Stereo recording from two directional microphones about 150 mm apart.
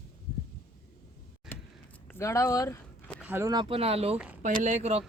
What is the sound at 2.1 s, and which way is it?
Speech, 20° left (ahead or behind).